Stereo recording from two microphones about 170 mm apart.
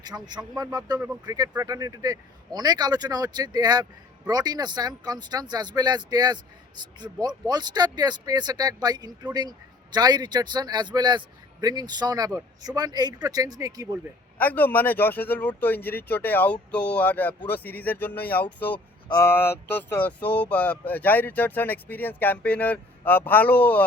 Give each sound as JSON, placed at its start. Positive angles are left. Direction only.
{"t": 0.0, "sound": "speech", "side_deg": -25}
{"t": 14.3, "sound": "speech", "side_deg": 10}